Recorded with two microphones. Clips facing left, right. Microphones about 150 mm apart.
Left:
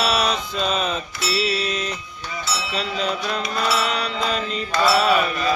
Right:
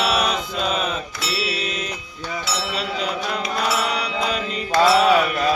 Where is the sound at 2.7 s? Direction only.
10° right (ahead or behind).